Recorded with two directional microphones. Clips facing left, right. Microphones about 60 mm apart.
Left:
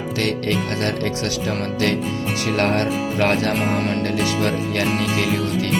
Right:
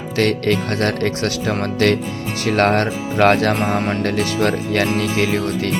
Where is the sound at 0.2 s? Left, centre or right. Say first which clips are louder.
Right 5 dB; right.